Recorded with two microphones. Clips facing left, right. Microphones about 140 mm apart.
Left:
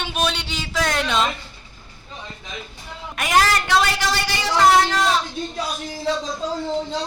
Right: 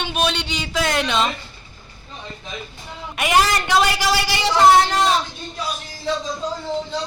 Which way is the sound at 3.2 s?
5° right (ahead or behind).